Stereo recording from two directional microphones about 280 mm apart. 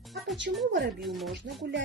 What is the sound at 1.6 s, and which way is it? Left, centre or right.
Music, right.